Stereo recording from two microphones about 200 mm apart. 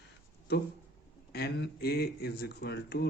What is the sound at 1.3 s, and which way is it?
Speech, 55° left (ahead or behind).